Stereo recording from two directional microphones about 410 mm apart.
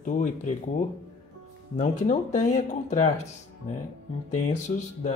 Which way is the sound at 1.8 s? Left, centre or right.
Centre.